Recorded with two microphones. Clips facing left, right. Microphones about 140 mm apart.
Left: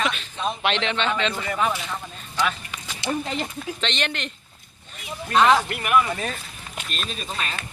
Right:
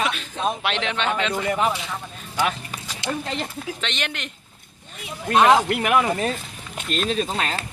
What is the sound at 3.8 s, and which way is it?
Speech, 10° right (ahead or behind).